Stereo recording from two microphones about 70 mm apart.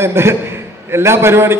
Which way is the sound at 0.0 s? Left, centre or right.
Right.